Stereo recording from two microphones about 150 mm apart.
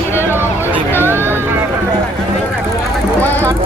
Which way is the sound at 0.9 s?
15° right (ahead or behind).